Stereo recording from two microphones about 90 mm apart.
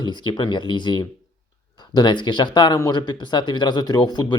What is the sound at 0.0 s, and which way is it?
Speech, 55° left (ahead or behind).